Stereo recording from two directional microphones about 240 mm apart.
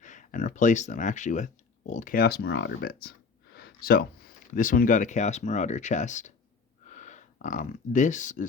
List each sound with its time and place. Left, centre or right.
0.0 s speech: left